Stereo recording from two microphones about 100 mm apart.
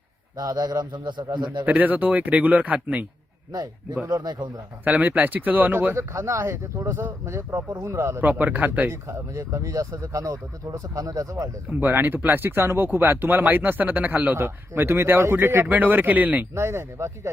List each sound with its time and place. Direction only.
0.3 s speech: 40° right (ahead or behind)
0.9 s speech: 50° right (ahead or behind)
1.6 s speech: 15° right (ahead or behind)
4.0 s speech: 40° right (ahead or behind)
4.9 s speech: 15° right (ahead or behind); by 11.4 s 35° right (ahead or behind)
11.8 s speech: 20° right (ahead or behind)
16.6 s speech: 30° right (ahead or behind)